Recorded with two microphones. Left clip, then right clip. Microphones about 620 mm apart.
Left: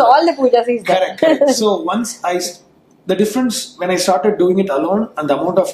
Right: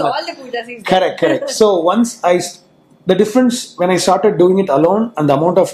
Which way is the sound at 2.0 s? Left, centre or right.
Right.